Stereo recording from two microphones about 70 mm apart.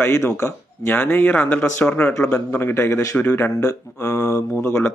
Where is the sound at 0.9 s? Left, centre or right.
Left.